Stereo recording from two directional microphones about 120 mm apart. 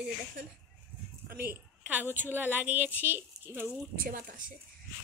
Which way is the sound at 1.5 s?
15° right (ahead or behind).